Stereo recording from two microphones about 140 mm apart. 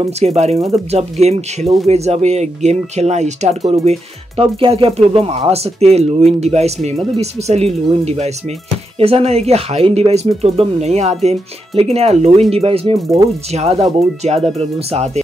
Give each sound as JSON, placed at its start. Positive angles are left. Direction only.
{"t": 0.0, "sound": "speech", "side_deg": -50}
{"t": 4.4, "sound": "speech", "side_deg": -40}